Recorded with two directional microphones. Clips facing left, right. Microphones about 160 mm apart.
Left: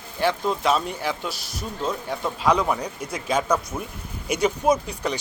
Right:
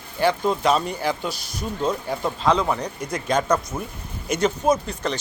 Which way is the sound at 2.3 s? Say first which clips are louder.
Even; 10° left (ahead or behind).